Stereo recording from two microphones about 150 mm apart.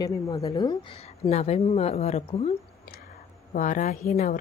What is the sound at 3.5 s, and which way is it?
Speech, 60° left (ahead or behind).